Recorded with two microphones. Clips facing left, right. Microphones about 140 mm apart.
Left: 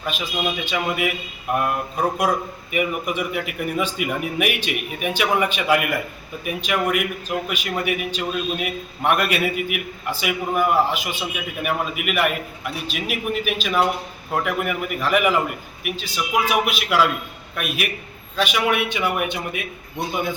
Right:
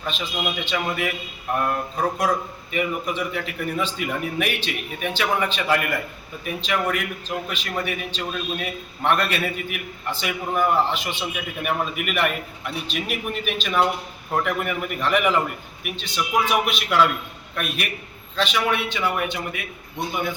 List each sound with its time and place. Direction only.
0.0 s a man's voice: 10° left (ahead or behind)